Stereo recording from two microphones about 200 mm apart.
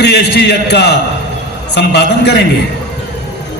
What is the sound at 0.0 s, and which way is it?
A man's voice, 55° left (ahead or behind).